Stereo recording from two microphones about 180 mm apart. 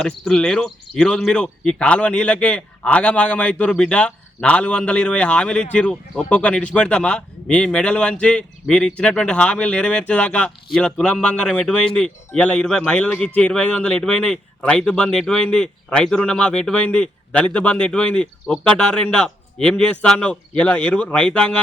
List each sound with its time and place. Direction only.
0.0 s speech: 5° left (ahead or behind)